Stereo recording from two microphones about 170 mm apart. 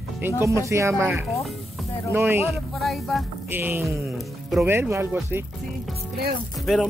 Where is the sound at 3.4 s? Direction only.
10° right (ahead or behind).